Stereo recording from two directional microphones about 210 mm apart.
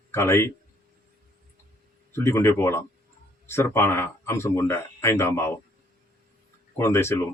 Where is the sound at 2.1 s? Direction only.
10° left (ahead or behind).